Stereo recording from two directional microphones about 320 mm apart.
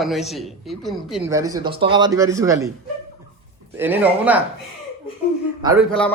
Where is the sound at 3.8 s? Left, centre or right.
Centre.